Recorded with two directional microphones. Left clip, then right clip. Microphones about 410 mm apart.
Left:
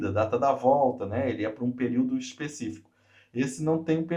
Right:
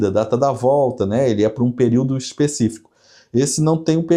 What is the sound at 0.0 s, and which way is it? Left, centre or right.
Speech, right.